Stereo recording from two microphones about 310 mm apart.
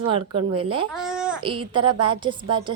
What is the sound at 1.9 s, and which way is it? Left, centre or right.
Speech, centre.